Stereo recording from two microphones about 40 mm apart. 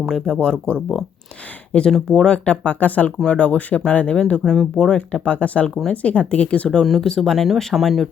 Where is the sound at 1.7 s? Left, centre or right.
Left.